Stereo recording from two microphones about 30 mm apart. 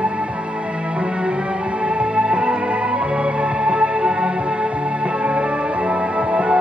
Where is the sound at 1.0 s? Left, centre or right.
Right.